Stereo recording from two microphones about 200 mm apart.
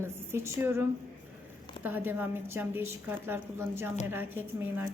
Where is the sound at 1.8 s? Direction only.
10° right (ahead or behind).